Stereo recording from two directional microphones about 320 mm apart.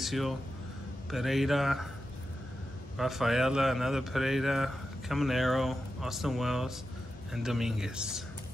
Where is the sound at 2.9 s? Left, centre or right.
Centre.